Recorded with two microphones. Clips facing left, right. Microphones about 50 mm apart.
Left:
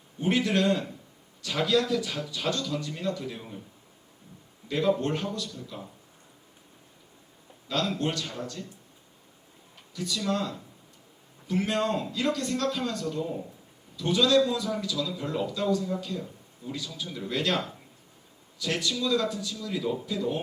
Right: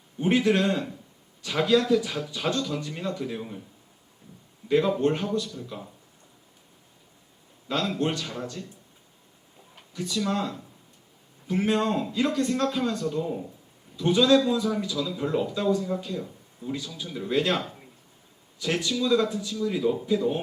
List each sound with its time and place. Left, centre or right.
0.2 s a man's voice: right
4.6 s a sound: right
4.9 s a man's voice: right
7.9 s a man's voice: right
9.9 s a man's voice: right
18.6 s a man's voice: right
20.1 s a man's voice: right